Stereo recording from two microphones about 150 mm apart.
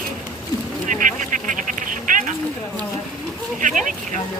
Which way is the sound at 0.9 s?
60° right (ahead or behind).